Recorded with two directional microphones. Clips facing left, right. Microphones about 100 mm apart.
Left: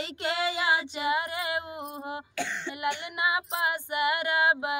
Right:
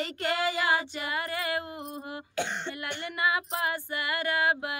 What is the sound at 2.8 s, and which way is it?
Female singing, 20° left (ahead or behind).